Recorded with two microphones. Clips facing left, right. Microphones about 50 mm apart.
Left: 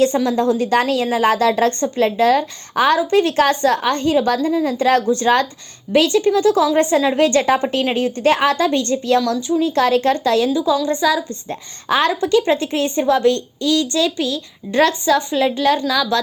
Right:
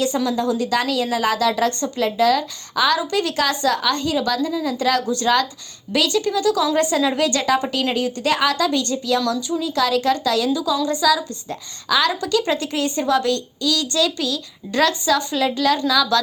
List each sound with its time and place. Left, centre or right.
0.3 s a woman's voice: left